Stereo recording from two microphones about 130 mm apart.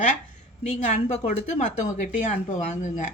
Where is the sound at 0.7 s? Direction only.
60° left (ahead or behind).